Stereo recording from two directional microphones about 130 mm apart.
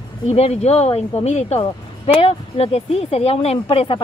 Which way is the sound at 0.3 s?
50° left (ahead or behind).